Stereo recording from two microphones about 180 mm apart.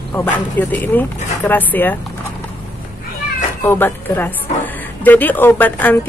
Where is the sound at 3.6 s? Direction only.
10° left (ahead or behind).